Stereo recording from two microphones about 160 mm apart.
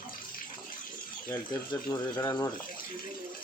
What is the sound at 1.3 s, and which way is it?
Speech, 20° left (ahead or behind).